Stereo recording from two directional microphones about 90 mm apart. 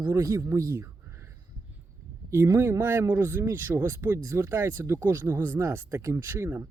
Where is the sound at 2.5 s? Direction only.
30° right (ahead or behind).